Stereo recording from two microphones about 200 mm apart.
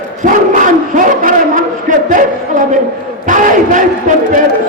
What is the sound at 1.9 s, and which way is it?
Speech, 40° right (ahead or behind).